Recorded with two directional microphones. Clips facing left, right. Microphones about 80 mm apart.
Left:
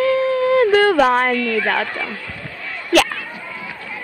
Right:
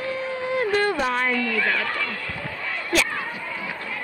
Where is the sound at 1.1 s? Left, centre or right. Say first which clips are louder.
Left 7 dB; left.